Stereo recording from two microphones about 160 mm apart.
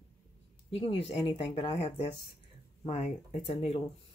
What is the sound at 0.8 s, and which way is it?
Speech, 40° left (ahead or behind).